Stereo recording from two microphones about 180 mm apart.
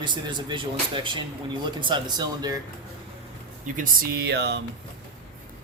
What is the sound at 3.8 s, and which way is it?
Speech, 60° right (ahead or behind).